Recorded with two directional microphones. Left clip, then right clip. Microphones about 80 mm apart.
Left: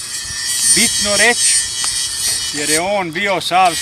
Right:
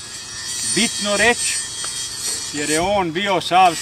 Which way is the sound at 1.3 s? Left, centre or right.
Left.